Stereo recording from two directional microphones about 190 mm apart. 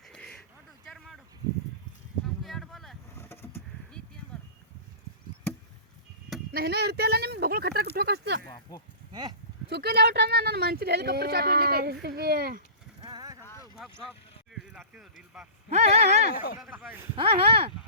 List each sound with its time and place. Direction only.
0.1 s a sound: 5° left (ahead or behind)
2.4 s a sound: centre (ahead or behind)
3.2 s vehicle: 10° left (ahead or behind)
6.5 s speech: 55° right (ahead or behind)
9.6 s speech: 60° right (ahead or behind)
13.0 s vehicle: 20° right (ahead or behind)
13.4 s boat: 15° left (ahead or behind)
14.7 s a sound: 5° right (ahead or behind)
15.7 s speech: 35° right (ahead or behind)
16.6 s a man's voice: 5° right (ahead or behind)
17.2 s speech: 30° right (ahead or behind)